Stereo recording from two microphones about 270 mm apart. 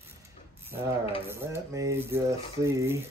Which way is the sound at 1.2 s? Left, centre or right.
Centre.